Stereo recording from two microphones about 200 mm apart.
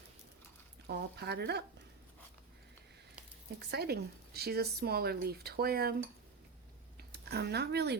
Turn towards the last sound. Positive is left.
turn(degrees=-55)  # may be behind; listen again after turning